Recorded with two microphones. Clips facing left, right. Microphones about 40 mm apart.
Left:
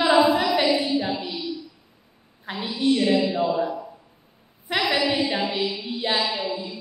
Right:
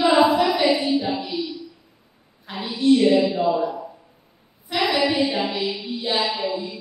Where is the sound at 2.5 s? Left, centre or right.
Left.